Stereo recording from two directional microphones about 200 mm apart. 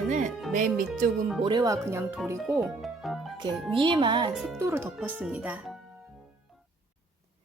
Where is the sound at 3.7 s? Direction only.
25° right (ahead or behind).